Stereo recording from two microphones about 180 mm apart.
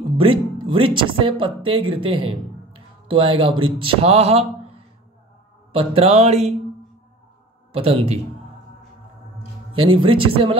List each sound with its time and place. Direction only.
0.2 s speech: 30° right (ahead or behind)
7.7 s speech: 30° right (ahead or behind)
9.8 s speech: 30° right (ahead or behind)